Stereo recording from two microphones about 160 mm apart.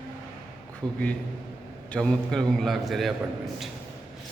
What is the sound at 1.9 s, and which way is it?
A man's voice, 5° left (ahead or behind).